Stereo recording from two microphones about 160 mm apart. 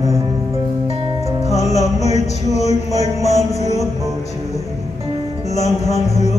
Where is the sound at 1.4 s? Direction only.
45° left (ahead or behind).